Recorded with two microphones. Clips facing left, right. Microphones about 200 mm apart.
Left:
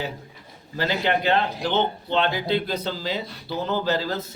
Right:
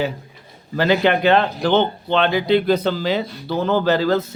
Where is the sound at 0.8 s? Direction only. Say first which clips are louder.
Right 7 dB; 65° right (ahead or behind).